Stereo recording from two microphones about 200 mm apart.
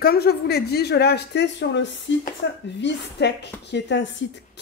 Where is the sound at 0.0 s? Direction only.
50° left (ahead or behind).